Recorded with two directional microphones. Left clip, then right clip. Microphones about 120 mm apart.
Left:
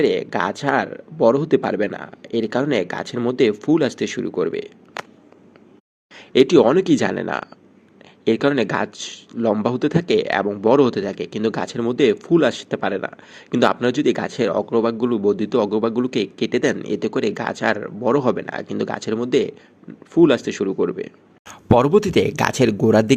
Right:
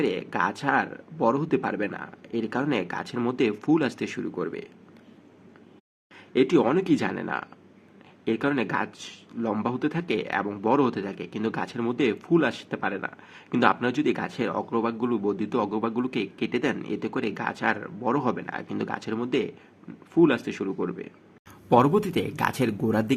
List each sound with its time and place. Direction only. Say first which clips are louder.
0.0 s speech: left 7 dB; 30° left (ahead or behind)
6.1 s a sound: left 8 dB; 55° left (ahead or behind)
6.5 s speech: left 7 dB; 40° left (ahead or behind)
10.6 s speech: left 8 dB; 35° left (ahead or behind)
21.4 s speech: left 4 dB; 70° left (ahead or behind); by 23.1 s 50° left (ahead or behind)